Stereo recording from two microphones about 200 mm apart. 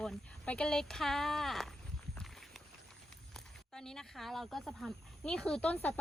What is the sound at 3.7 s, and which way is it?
Speech, 5° left (ahead or behind).